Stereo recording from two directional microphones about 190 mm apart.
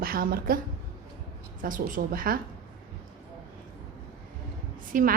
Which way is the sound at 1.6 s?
45° right (ahead or behind).